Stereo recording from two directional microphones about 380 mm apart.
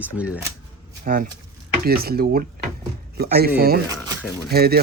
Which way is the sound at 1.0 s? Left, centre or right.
Right.